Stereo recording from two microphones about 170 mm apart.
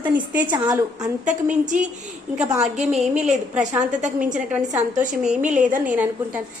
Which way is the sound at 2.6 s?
40° right (ahead or behind).